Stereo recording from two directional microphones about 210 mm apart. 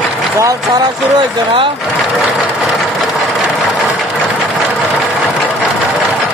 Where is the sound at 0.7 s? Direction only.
20° right (ahead or behind).